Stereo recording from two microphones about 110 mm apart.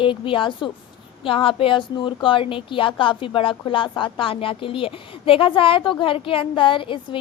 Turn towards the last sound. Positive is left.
turn(degrees=50)  # may be behind; listen again after turning